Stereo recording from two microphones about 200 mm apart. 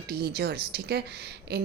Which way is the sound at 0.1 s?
55° right (ahead or behind).